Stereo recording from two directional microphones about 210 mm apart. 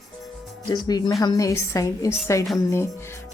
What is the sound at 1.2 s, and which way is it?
Music, 15° left (ahead or behind).